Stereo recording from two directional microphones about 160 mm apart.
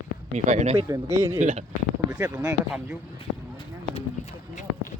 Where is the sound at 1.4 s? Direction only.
45° right (ahead or behind).